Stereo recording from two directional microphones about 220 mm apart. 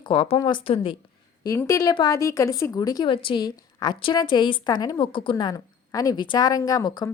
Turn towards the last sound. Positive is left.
turn(degrees=20)  # may be behind; listen again after turning